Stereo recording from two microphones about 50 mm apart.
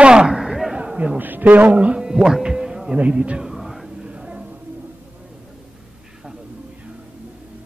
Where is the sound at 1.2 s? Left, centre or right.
Right.